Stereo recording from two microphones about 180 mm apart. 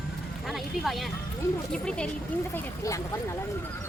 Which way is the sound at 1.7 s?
5° left (ahead or behind).